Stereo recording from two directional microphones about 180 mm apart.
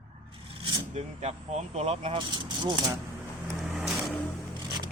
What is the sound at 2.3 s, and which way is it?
Speech, 25° right (ahead or behind).